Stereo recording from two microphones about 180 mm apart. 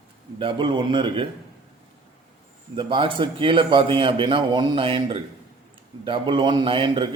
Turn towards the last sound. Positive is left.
turn(degrees=-25)  # may be behind; listen again after turning